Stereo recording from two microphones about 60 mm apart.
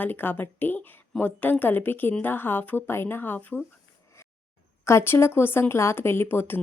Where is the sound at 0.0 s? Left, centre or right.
Left.